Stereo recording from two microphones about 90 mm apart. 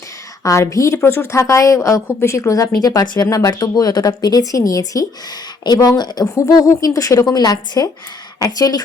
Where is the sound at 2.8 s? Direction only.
45° left (ahead or behind).